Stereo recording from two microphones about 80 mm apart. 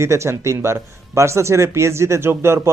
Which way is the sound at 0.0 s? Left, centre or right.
Right.